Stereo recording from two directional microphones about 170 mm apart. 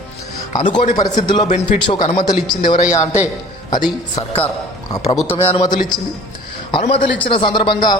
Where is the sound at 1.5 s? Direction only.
40° left (ahead or behind).